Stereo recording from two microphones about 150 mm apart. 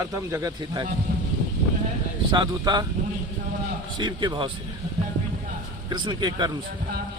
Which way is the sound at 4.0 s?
30° right (ahead or behind).